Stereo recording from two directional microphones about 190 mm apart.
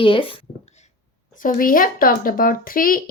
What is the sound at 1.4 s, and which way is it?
Speech, 45° left (ahead or behind).